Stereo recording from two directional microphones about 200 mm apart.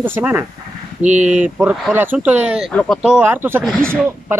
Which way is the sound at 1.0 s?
35° right (ahead or behind).